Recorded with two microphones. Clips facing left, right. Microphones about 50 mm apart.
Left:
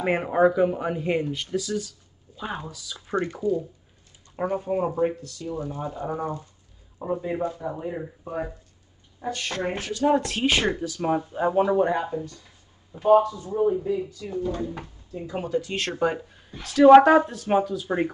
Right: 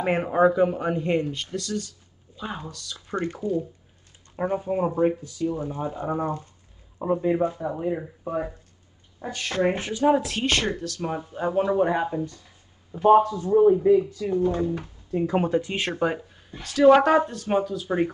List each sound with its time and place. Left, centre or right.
0.0 s speech: centre
4.5 s speech: centre; by 10.0 s right
10.0 s speech: centre
10.4 s speech: centre
11.9 s speech: centre
13.0 s speech: right
13.5 s speech: right
13.8 s speech: right
15.1 s speech: right
15.6 s speech: right
16.0 s speech: centre